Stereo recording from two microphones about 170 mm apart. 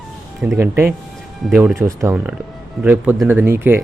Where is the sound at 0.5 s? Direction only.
15° right (ahead or behind).